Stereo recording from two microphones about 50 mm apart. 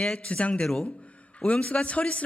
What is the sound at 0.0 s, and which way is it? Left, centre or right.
Speech, left.